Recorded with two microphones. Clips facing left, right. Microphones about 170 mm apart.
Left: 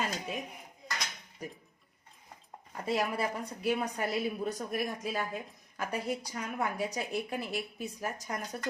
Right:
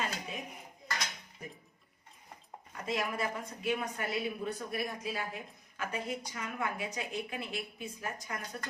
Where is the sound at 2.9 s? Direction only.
35° left (ahead or behind).